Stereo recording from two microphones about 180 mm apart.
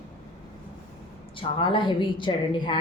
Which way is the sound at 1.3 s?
25° left (ahead or behind).